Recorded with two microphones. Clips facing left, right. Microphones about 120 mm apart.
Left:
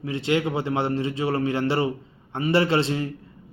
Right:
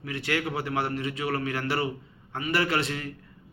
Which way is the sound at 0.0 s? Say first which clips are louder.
Left 6 dB; 25° left (ahead or behind).